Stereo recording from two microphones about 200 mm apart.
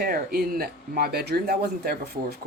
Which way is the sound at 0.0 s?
50° right (ahead or behind).